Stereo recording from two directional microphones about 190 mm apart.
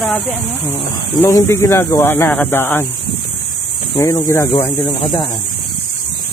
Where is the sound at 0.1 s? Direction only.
10° left (ahead or behind).